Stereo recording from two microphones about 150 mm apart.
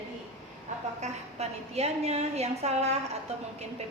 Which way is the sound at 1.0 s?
45° right (ahead or behind).